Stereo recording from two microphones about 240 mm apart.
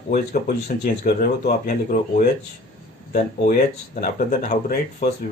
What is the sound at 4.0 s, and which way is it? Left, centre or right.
Speech, left.